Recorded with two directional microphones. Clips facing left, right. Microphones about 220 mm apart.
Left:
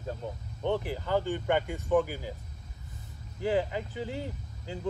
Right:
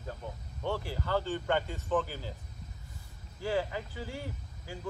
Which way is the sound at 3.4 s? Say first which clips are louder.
Left 4 dB; 20° left (ahead or behind).